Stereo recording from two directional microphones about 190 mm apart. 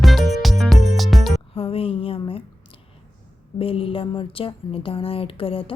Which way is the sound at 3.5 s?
30° left (ahead or behind).